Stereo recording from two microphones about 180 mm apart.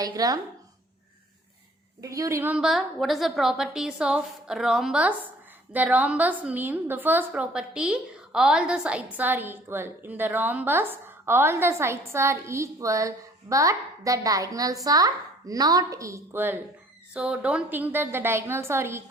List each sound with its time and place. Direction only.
0.0 s speech: 20° right (ahead or behind)
2.0 s a woman's voice: 20° right (ahead or behind)